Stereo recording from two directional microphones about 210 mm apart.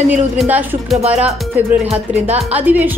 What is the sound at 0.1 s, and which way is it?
Speech, 5° right (ahead or behind).